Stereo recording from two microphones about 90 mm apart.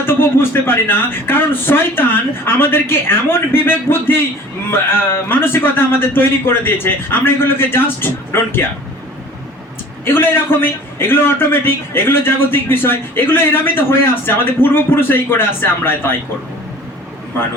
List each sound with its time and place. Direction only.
0.0 s a man's voice: 25° left (ahead or behind)
10.1 s a man's voice: 25° left (ahead or behind)